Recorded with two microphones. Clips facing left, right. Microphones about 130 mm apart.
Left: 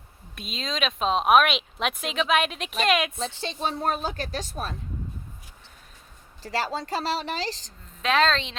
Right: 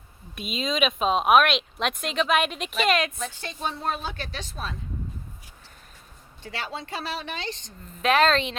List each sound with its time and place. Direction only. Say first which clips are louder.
0.3 s speech: right 4 dB; 5° right (ahead or behind)
3.2 s speech: left 3 dB; 25° left (ahead or behind)
3.8 s speech: left 3 dB; 45° left (ahead or behind)
6.4 s speech: left 6 dB; 35° left (ahead or behind)
8.0 s speech: right 2 dB; 5° right (ahead or behind)